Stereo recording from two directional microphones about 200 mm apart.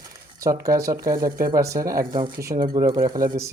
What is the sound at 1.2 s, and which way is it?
Speech, 45° right (ahead or behind).